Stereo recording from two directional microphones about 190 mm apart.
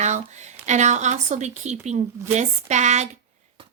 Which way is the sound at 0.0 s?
40° right (ahead or behind).